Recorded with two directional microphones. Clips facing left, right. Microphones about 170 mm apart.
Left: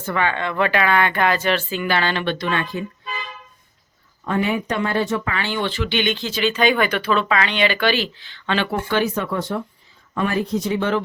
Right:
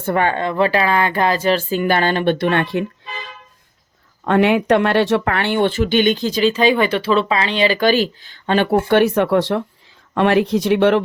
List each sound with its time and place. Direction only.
0.0 s speech: 50° right (ahead or behind)
4.2 s speech: 75° right (ahead or behind); by 8.7 s 45° right (ahead or behind)
8.9 s speech: 65° right (ahead or behind)